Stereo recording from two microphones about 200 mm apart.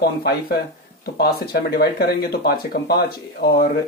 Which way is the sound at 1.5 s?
50° left (ahead or behind).